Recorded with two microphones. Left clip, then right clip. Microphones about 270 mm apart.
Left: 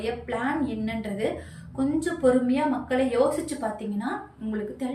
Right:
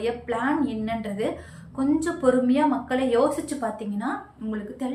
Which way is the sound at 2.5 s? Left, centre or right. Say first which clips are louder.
Right 3 dB; centre.